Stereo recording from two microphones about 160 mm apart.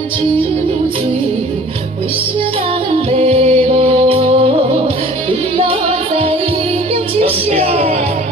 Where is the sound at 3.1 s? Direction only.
35° right (ahead or behind).